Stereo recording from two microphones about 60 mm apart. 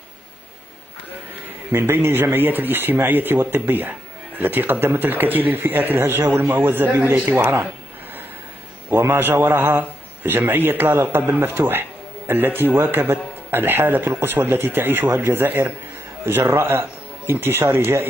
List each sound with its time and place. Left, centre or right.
1.7 s speech: right
7.2 s speech: right
8.9 s speech: right
12.7 s speech: right
13.0 s a man's voice: right